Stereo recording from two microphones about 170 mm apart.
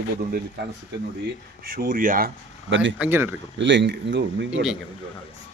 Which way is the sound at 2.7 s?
90° right.